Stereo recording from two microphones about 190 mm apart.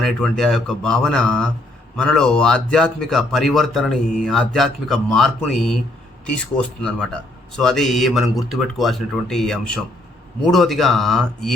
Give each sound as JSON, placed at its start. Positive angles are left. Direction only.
{"t": 0.0, "sound": "speech", "side_deg": 0}